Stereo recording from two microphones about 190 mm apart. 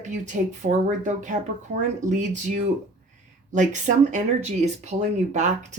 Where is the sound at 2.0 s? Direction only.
40° right (ahead or behind).